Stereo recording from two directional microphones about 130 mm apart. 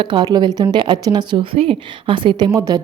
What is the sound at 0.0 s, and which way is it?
Speech, 40° right (ahead or behind).